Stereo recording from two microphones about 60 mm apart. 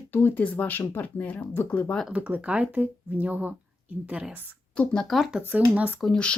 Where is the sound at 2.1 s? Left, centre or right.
Right.